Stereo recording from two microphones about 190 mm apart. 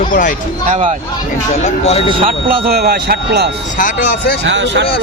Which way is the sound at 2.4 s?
55° right (ahead or behind).